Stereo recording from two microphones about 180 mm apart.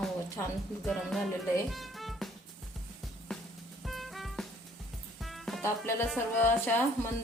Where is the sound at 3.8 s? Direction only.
Centre (ahead or behind).